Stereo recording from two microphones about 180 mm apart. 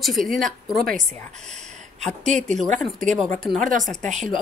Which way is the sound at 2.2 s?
40° right (ahead or behind).